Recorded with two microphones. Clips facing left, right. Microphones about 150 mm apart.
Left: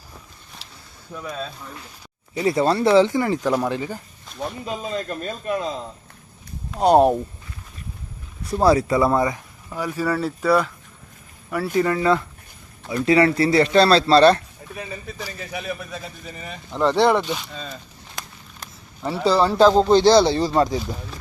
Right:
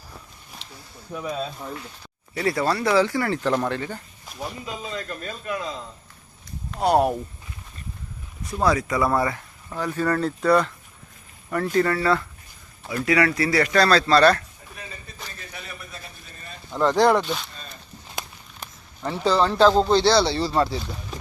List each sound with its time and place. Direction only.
1.1 s speech: 10° right (ahead or behind)
2.3 s speech: 25° left (ahead or behind)
4.6 s speech: 30° left (ahead or behind)
6.7 s speech: 20° left (ahead or behind)
8.4 s speech: 30° left (ahead or behind)
15.4 s speech: 90° left
16.7 s speech: 5° left (ahead or behind)
19.3 s speech: 10° left (ahead or behind)